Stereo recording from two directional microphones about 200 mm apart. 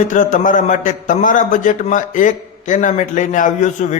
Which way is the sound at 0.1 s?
40° left (ahead or behind).